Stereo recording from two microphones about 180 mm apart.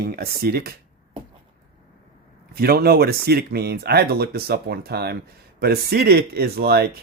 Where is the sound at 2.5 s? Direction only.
60° right (ahead or behind).